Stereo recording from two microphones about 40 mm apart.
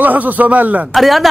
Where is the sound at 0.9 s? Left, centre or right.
Centre.